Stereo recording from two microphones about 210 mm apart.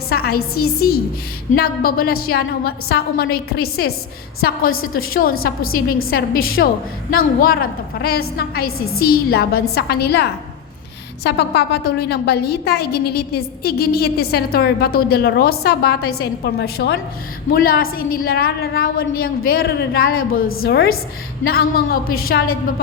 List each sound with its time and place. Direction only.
0.1 s a sound: 50° left (ahead or behind)
0.5 s a woman's voice: 45° left (ahead or behind)
20.5 s a woman's voice: 75° left (ahead or behind)
21.4 s a woman's voice: 45° left (ahead or behind)